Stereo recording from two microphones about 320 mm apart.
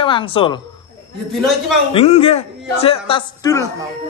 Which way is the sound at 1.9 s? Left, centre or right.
Centre.